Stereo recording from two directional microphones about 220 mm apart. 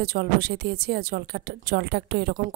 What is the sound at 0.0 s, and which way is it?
Speech, 45° right (ahead or behind).